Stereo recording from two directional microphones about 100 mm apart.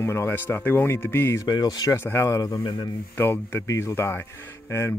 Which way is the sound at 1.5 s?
40° left (ahead or behind).